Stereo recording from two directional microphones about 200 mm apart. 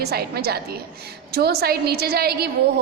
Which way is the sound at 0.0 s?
50° right (ahead or behind).